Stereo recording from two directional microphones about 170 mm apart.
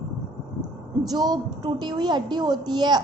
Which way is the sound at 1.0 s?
25° right (ahead or behind).